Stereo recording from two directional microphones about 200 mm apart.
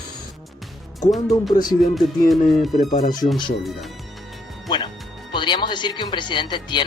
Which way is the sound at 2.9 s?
45° left (ahead or behind).